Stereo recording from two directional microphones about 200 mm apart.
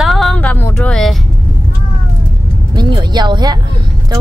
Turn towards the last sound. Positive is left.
turn(degrees=-20)  # may be behind; listen again after turning